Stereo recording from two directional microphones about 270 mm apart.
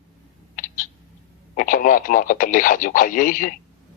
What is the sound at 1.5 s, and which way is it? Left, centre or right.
Speech, left.